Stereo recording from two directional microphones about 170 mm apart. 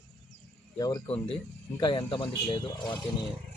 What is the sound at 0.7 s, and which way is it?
A man's voice, 20° left (ahead or behind).